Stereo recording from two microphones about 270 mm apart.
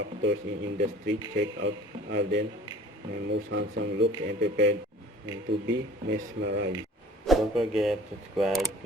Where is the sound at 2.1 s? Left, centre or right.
Right.